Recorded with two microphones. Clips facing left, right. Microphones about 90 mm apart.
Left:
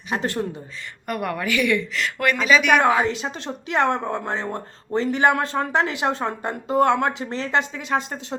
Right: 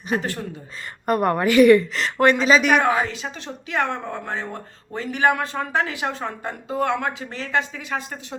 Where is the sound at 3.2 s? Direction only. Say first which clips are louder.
Left 3 dB; 35° left (ahead or behind).